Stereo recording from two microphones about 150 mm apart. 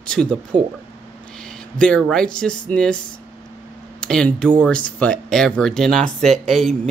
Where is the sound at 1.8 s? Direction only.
5° left (ahead or behind).